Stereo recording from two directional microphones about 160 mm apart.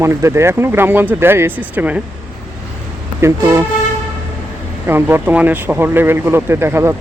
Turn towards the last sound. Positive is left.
turn(degrees=-15)  # may be behind; listen again after turning